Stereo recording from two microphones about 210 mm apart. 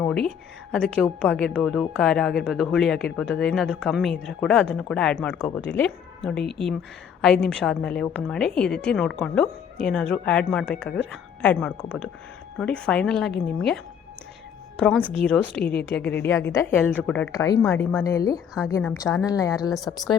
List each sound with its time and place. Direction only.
0.0 s a woman's voice: 5° left (ahead or behind)
14.8 s a woman's voice: 5° left (ahead or behind)
18.7 s speech: 5° left (ahead or behind)
19.2 s a woman's voice: 15° left (ahead or behind)